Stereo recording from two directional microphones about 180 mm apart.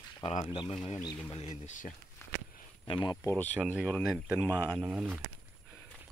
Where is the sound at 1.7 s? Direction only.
40° left (ahead or behind).